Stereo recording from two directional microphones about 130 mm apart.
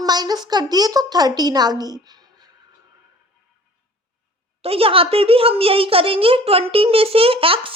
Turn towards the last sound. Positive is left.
turn(degrees=-45)  # may be behind; listen again after turning